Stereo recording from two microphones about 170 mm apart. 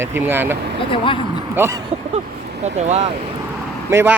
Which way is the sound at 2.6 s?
40° right (ahead or behind).